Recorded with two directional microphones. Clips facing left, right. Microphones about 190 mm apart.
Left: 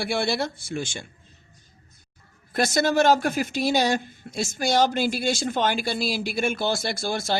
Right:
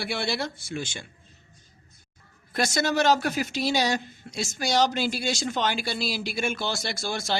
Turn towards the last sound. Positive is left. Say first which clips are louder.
# left 3 dB
turn(degrees=50)  # may be behind; listen again after turning